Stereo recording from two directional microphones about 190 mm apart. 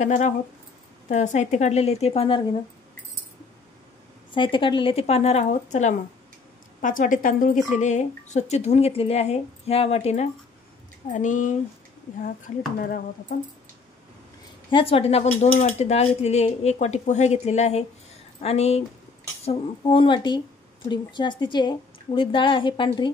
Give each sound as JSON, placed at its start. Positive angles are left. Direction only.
{"t": 0.0, "sound": "a woman's voice", "side_deg": 40}
{"t": 4.3, "sound": "a woman's voice", "side_deg": 25}
{"t": 14.7, "sound": "a woman's voice", "side_deg": 30}